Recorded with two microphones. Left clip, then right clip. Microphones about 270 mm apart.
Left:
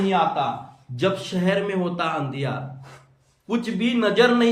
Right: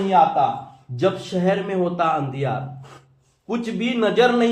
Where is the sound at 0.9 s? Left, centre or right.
Centre.